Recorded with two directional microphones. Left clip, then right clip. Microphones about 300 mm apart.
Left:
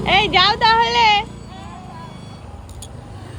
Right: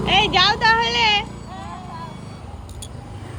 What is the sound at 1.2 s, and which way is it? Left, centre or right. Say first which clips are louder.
Music: right 2 dB; centre.